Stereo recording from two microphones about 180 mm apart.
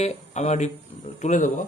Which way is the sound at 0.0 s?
40° left (ahead or behind).